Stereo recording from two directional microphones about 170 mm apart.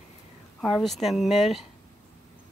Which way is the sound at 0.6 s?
Centre (ahead or behind).